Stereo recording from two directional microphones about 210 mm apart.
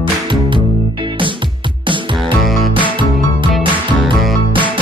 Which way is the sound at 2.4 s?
Centre (ahead or behind).